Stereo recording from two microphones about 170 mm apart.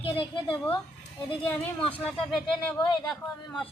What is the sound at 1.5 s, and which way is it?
Speech, 10° left (ahead or behind).